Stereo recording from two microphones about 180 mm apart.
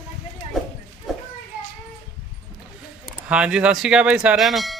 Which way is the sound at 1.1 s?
Centre (ahead or behind).